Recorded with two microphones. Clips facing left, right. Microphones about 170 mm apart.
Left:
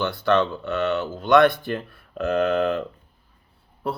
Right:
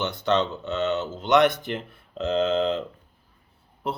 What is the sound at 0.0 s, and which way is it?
Speech, 20° right (ahead or behind).